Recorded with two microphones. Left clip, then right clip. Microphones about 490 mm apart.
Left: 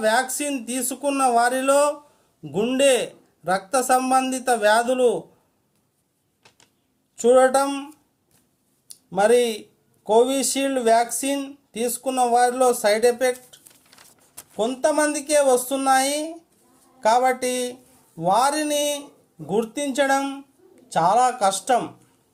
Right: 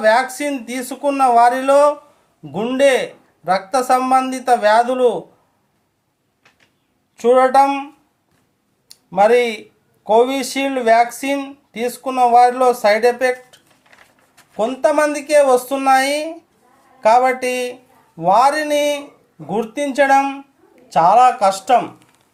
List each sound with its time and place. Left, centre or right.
0.0 s speech: left
7.2 s speech: left
8.9 s speech: left